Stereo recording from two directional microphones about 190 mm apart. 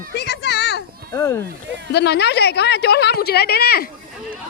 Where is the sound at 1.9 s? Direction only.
60° left (ahead or behind).